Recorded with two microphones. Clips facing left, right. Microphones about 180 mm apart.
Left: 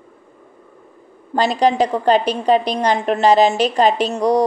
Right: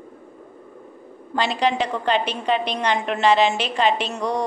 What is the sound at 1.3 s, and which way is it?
A woman's voice, 40° left (ahead or behind).